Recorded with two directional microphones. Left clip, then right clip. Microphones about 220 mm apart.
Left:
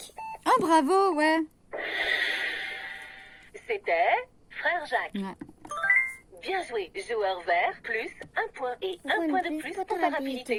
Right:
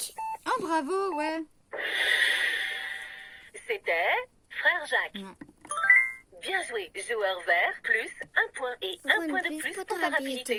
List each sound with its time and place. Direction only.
0.4 s speech: 40° left (ahead or behind)
1.7 s snort: 15° right (ahead or behind)
5.4 s a woman's voice: 10° right (ahead or behind)
9.8 s a woman's voice: 50° right (ahead or behind)
10.1 s a woman's voice: 15° right (ahead or behind)